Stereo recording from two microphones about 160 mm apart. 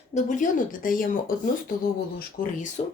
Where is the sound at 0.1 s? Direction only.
50° left (ahead or behind).